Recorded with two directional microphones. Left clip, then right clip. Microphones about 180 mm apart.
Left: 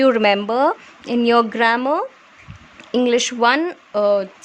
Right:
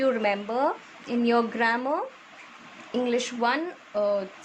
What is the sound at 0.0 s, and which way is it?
A woman's voice, 60° left (ahead or behind).